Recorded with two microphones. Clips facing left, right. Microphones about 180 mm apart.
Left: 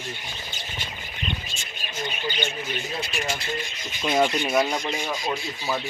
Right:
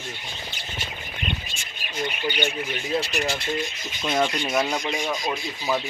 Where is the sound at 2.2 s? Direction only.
65° right (ahead or behind).